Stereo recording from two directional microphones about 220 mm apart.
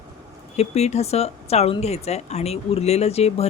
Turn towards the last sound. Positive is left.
turn(degrees=30)  # may be behind; listen again after turning